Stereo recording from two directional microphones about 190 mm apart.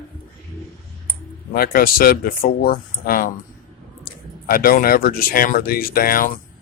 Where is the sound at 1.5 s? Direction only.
50° left (ahead or behind).